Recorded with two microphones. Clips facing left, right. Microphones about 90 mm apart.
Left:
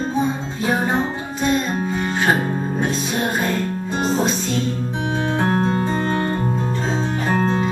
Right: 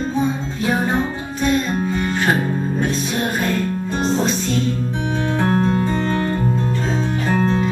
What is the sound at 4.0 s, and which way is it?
Music, 5° left (ahead or behind).